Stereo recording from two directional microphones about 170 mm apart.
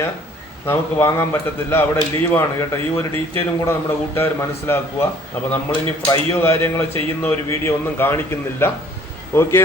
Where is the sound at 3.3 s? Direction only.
15° left (ahead or behind).